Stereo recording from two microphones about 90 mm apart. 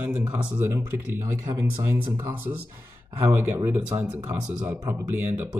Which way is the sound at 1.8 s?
25° right (ahead or behind).